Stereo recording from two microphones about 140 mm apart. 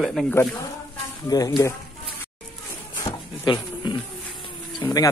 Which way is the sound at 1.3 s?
30° left (ahead or behind).